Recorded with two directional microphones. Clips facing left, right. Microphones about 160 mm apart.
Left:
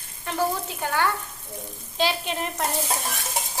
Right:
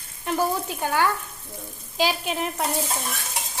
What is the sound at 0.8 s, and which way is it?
A child's voice, 10° right (ahead or behind).